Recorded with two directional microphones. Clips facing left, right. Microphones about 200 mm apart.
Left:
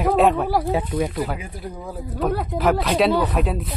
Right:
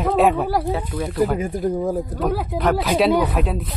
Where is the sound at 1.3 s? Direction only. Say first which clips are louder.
Right 12 dB; 45° right (ahead or behind).